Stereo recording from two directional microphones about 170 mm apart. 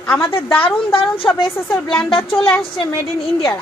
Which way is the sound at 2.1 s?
30° left (ahead or behind).